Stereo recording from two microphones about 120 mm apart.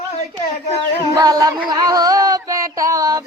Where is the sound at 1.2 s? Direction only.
30° right (ahead or behind).